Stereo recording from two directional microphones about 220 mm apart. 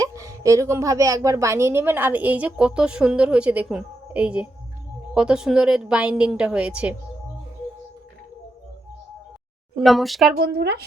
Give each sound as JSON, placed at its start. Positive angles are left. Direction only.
{"t": 0.0, "sound": "a woman's voice", "side_deg": -15}
{"t": 9.7, "sound": "a woman's voice", "side_deg": 0}
{"t": 10.3, "sound": "speech", "side_deg": -50}